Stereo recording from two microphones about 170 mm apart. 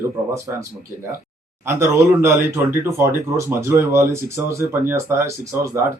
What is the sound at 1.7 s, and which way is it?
Speech, 15° right (ahead or behind).